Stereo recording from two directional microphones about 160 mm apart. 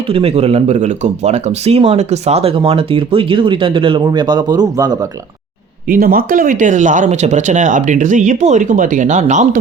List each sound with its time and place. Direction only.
0.1 s speech: 35° right (ahead or behind)
5.9 s speech: 65° right (ahead or behind); by 9.6 s 50° right (ahead or behind)